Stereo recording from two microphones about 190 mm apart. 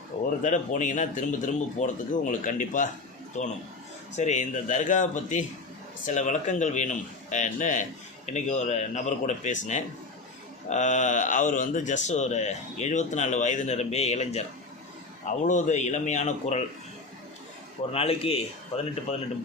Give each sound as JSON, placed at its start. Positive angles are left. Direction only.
{"t": 0.4, "sound": "speech", "side_deg": 40}
{"t": 15.4, "sound": "speech", "side_deg": 40}
{"t": 17.9, "sound": "speech", "side_deg": 30}